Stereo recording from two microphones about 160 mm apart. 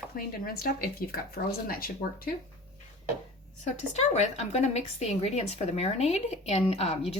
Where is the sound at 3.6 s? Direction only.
45° left (ahead or behind).